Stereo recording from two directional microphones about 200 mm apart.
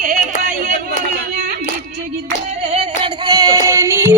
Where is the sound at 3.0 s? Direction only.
20° right (ahead or behind).